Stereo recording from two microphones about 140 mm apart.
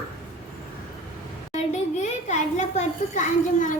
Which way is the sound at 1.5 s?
55° left (ahead or behind).